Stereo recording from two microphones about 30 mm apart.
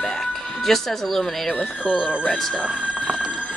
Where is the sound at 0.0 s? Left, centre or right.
Centre.